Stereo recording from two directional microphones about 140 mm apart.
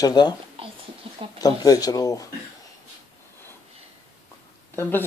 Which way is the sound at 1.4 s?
25° left (ahead or behind).